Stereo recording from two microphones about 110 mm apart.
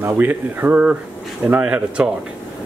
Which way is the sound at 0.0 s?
20° right (ahead or behind).